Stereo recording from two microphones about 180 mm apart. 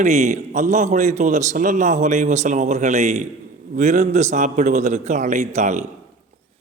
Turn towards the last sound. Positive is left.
turn(degrees=-40)  # may be behind; listen again after turning